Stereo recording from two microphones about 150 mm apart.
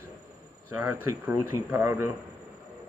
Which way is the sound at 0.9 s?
15° right (ahead or behind).